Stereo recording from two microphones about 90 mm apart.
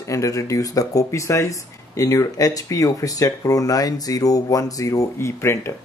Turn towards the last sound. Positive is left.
turn(degrees=30)  # may be behind; listen again after turning